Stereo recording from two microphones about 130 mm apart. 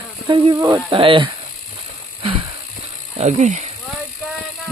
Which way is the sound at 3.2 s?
65° right (ahead or behind).